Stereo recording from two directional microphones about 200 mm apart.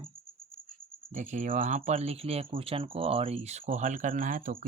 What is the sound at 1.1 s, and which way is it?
Speech, 35° right (ahead or behind).